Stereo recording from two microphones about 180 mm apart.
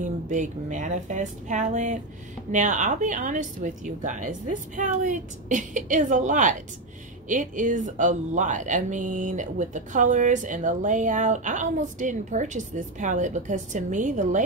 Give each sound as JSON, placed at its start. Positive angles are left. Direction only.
{"t": 0.0, "sound": "speech", "side_deg": -45}